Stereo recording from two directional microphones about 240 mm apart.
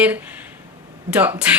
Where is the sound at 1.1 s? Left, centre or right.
Centre.